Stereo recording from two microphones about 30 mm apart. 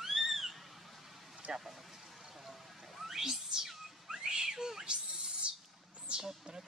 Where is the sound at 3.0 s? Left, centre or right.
Centre.